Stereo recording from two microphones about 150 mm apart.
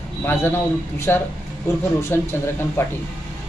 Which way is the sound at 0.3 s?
15° left (ahead or behind).